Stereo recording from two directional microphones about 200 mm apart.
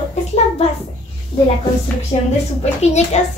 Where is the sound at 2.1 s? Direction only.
30° left (ahead or behind).